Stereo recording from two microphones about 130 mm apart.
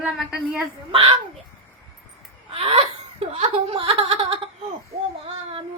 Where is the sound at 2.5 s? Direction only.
45° right (ahead or behind).